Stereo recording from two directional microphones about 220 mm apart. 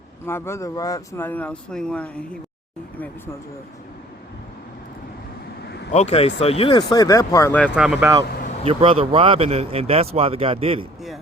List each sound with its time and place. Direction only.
0.3 s speech: 10° left (ahead or behind)
5.6 s vehicle: 50° left (ahead or behind)
5.9 s speech: 30° left (ahead or behind); by 7.7 s 10° left (ahead or behind)
7.7 s speech: 5° right (ahead or behind)
8.6 s speech: 25° right (ahead or behind)